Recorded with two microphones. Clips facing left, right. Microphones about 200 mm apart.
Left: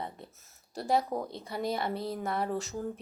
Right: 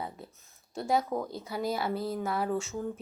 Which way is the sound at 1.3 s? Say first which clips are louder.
Right 1 dB; centre (ahead or behind).